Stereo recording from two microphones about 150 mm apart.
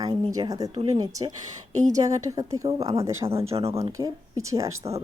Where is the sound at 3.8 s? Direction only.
20° right (ahead or behind).